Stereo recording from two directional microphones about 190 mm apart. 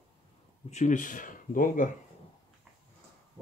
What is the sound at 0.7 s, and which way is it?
Speech, 40° left (ahead or behind).